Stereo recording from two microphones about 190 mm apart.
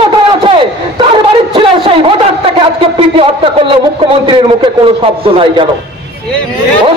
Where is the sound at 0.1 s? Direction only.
25° right (ahead or behind).